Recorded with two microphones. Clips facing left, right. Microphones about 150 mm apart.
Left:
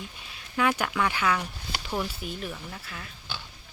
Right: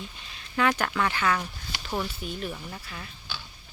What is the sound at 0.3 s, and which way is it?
Speech, 10° left (ahead or behind).